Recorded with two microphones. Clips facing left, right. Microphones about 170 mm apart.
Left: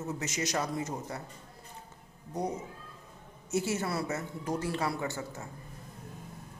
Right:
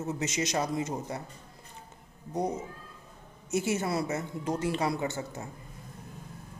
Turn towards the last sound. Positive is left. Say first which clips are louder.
# right 3 dB
turn(degrees=-20)  # may be behind; listen again after turning